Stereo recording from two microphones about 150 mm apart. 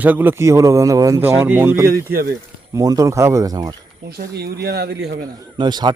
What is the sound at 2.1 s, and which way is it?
Speech, 80° right.